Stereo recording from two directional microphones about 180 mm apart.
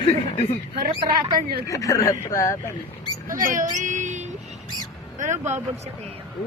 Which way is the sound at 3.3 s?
50° right (ahead or behind).